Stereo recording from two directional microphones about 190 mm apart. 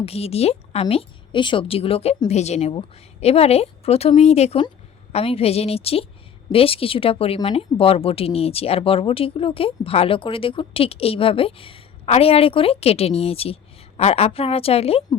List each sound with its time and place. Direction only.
0.0 s a woman's voice: 30° left (ahead or behind)